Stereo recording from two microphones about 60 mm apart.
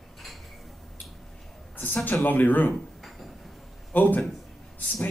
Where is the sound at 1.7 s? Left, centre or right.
Left.